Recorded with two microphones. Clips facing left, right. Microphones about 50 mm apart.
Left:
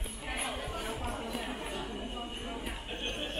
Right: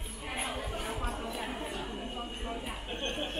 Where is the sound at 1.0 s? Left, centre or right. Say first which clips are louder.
Even; centre.